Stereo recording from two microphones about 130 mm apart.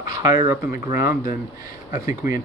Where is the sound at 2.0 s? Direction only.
90° left.